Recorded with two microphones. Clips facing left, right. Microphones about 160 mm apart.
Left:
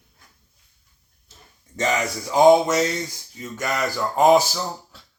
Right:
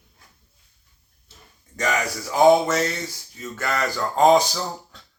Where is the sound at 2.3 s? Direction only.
15° left (ahead or behind).